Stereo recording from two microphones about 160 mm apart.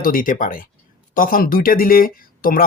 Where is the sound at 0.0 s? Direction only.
60° left (ahead or behind).